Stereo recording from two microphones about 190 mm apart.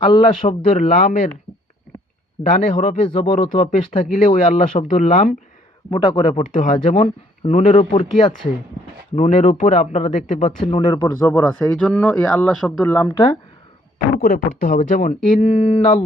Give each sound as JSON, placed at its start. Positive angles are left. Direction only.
{"t": 0.4, "sound": "speech", "side_deg": 40}
{"t": 2.5, "sound": "speech", "side_deg": 40}
{"t": 5.9, "sound": "speech", "side_deg": 30}
{"t": 10.6, "sound": "speech", "side_deg": 25}
{"t": 11.7, "sound": "speech", "side_deg": 5}
{"t": 14.2, "sound": "speech", "side_deg": 40}